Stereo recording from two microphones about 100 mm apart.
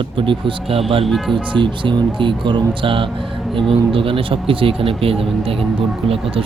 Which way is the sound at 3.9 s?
65° right (ahead or behind).